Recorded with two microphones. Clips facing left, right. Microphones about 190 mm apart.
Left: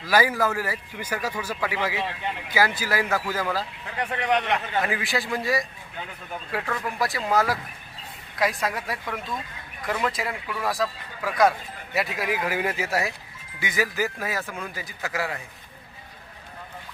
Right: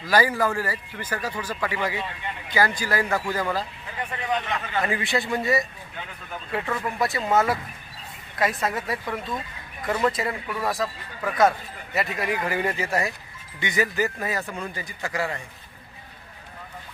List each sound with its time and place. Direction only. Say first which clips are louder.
0.1 s a man's voice: even; 10° left (ahead or behind)
4.1 s speech: left 4 dB; 75° left (ahead or behind)
4.8 s a man's voice: right 1 dB; centre (ahead or behind)